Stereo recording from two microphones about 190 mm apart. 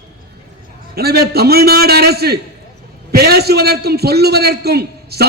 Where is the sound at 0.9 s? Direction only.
55° right (ahead or behind).